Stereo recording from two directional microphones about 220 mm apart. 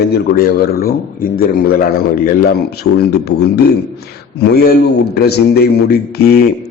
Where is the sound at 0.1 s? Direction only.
40° left (ahead or behind).